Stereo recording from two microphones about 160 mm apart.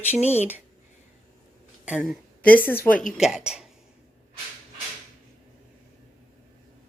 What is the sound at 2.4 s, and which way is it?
Speech, 10° left (ahead or behind).